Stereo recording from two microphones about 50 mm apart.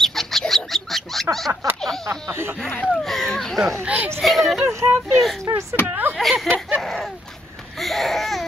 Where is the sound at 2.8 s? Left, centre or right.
Centre.